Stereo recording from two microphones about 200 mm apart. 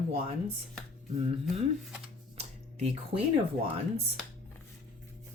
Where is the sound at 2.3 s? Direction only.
35° right (ahead or behind).